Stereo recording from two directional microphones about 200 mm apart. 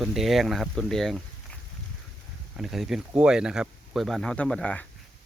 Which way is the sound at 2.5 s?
Centre (ahead or behind).